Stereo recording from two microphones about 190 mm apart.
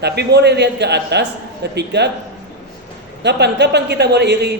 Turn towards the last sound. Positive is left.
turn(degrees=-65)  # may be behind; listen again after turning